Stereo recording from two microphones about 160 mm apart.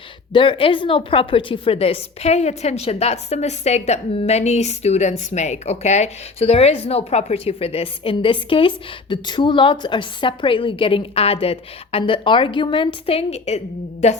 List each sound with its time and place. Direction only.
0.3 s a woman's voice: 35° left (ahead or behind)